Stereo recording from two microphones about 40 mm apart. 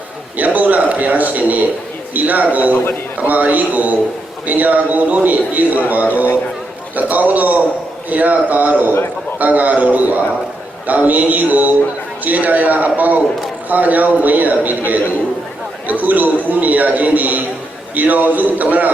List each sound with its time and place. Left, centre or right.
0.3 s a man's voice: right
6.9 s a man's voice: right